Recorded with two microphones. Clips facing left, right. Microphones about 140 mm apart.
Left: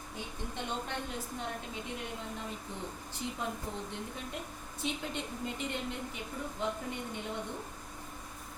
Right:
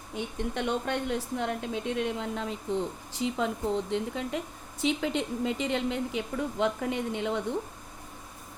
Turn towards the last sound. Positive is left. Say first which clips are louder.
# right 9 dB
turn(degrees=-90)